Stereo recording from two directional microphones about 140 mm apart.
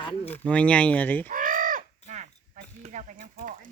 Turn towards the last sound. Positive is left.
turn(degrees=-65)  # may be behind; listen again after turning